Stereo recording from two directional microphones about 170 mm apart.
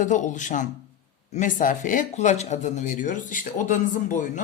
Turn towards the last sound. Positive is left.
turn(degrees=50)  # may be behind; listen again after turning